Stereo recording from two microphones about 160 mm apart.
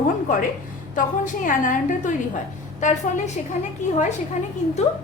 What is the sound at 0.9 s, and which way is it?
A woman's voice, 55° left (ahead or behind).